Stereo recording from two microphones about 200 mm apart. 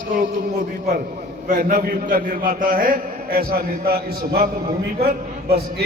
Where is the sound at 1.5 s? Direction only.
40° right (ahead or behind).